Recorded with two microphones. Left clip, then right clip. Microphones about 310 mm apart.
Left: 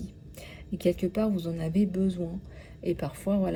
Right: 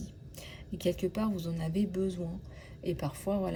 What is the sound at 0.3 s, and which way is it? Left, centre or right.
Speech, centre.